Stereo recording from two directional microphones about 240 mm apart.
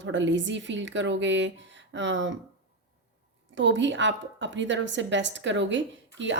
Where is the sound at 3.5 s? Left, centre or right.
Right.